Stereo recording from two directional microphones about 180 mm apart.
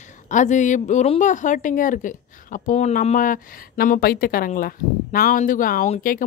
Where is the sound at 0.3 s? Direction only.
45° left (ahead or behind).